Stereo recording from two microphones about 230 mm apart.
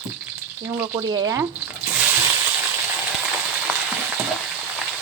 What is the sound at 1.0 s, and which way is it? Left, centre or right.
Speech, centre.